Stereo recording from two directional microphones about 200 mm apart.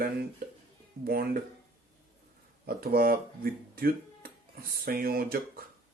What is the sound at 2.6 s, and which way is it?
Speech, 50° right (ahead or behind).